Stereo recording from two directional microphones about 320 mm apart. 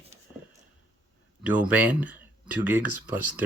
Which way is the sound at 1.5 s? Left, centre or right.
Centre.